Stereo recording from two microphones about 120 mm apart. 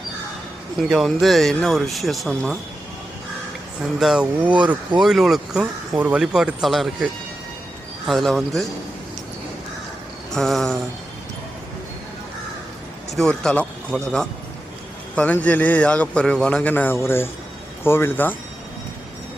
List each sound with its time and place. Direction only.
0.9 s speech: centre (ahead or behind)
4.0 s speech: 5° right (ahead or behind)
10.3 s speech: 5° left (ahead or behind)
13.1 s a man's voice: 5° left (ahead or behind)